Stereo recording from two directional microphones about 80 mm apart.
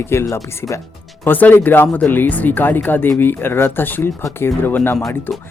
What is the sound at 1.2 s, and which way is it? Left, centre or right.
Speech, left.